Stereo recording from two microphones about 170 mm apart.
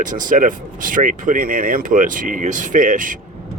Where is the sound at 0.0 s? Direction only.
50° right (ahead or behind).